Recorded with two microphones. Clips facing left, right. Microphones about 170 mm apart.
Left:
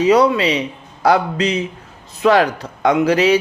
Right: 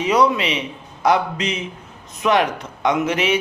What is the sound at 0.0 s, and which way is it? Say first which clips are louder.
Speech: left 4 dB; 35° left (ahead or behind).